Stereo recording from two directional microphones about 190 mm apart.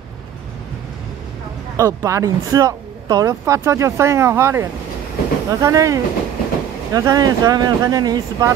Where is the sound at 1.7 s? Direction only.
15° right (ahead or behind).